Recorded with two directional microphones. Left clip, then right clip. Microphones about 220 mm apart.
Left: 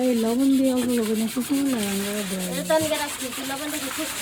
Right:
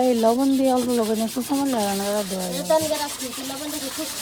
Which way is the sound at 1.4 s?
15° right (ahead or behind).